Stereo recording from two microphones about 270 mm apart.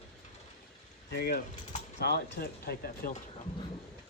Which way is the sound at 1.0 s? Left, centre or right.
Left.